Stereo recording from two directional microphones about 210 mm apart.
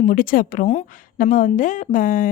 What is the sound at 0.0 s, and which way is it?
A woman's voice, 40° left (ahead or behind).